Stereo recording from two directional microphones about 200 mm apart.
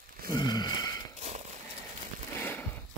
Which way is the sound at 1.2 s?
35° right (ahead or behind).